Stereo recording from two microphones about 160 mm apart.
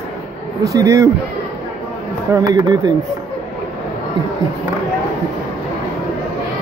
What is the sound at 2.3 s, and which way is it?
Speech, 20° right (ahead or behind).